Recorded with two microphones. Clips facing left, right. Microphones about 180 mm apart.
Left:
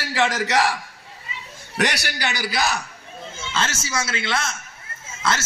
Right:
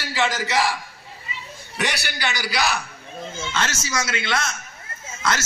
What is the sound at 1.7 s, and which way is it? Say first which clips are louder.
Speech: left 3 dB; 70° left (ahead or behind).